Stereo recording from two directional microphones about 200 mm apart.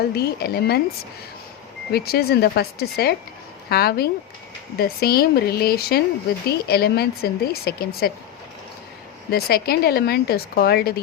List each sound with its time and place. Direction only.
0.2 s speech: 55° left (ahead or behind)
1.9 s speech: 50° left (ahead or behind)
9.3 s speech: 50° left (ahead or behind)